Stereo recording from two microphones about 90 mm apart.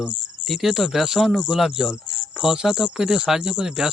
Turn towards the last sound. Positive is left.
turn(degrees=-10)  # may be behind; listen again after turning